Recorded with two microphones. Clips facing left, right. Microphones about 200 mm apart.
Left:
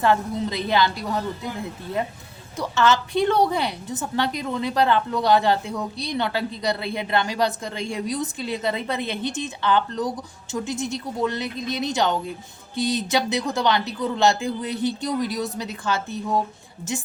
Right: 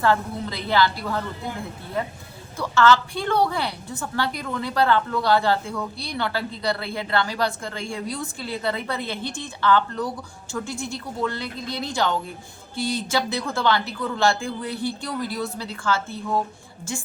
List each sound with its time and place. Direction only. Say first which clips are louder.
0.0 s a woman's voice: left 1 dB; 20° left (ahead or behind)
2.6 s a woman's voice: right 2 dB; 20° left (ahead or behind)